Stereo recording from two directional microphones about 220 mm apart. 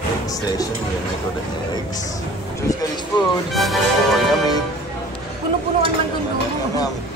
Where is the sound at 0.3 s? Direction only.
15° left (ahead or behind).